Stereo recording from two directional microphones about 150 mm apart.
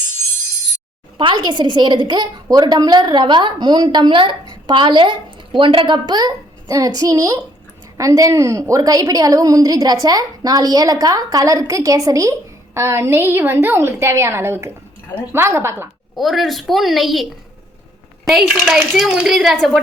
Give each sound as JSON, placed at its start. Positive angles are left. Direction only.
{"t": 1.2, "sound": "a woman's voice", "side_deg": -30}
{"t": 16.1, "sound": "a child's voice", "side_deg": 0}
{"t": 18.6, "sound": "a child's voice", "side_deg": 0}